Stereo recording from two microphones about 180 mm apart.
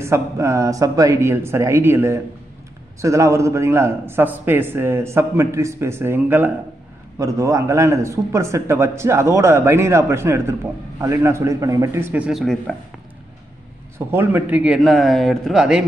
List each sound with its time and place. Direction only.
0.0 s a man's voice: 15° right (ahead or behind); by 12.7 s centre (ahead or behind)
13.9 s speech: 15° right (ahead or behind)